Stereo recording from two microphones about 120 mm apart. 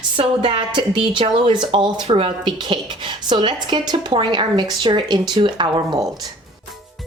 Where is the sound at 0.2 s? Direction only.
50° right (ahead or behind).